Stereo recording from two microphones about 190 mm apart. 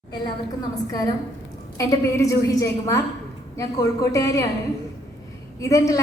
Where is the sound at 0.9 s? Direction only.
20° left (ahead or behind).